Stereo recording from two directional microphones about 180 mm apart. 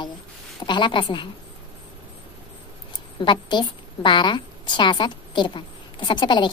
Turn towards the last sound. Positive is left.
turn(degrees=25)  # may be behind; listen again after turning